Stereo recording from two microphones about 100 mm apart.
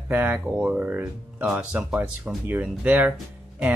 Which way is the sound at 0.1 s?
15° right (ahead or behind).